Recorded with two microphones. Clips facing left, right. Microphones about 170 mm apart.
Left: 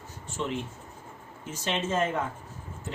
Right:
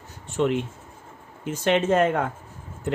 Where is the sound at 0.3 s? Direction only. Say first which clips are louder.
Right 9 dB; 60° right (ahead or behind).